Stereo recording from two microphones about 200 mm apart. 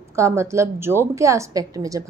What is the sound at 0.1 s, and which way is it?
A woman's voice, 15° right (ahead or behind).